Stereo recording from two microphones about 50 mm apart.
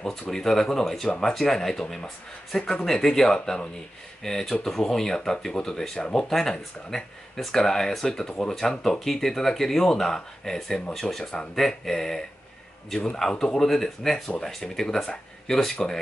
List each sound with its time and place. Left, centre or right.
0.3 s speech: centre
3.3 s speech: left
4.2 s speech: centre